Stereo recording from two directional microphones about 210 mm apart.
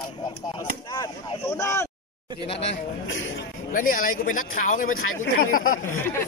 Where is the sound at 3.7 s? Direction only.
40° left (ahead or behind).